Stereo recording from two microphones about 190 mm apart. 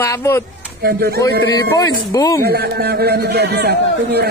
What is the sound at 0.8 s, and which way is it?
Speech, 55° right (ahead or behind).